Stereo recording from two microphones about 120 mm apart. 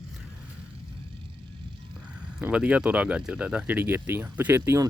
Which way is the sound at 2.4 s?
10° right (ahead or behind).